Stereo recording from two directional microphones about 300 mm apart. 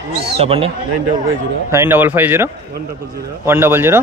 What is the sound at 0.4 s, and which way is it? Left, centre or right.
Speech, centre.